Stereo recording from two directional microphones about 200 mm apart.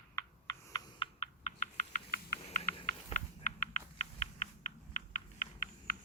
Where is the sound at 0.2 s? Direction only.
20° left (ahead or behind).